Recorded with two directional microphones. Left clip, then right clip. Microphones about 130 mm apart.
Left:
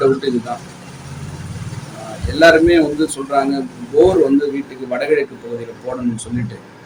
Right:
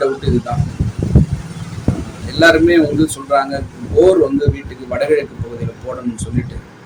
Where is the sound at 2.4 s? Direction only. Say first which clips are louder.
Even; 20° right (ahead or behind).